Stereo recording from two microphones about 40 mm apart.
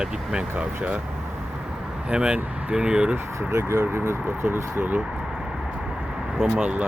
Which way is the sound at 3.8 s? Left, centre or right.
Right.